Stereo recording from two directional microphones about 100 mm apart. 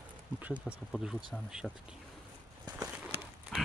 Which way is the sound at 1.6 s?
5° left (ahead or behind).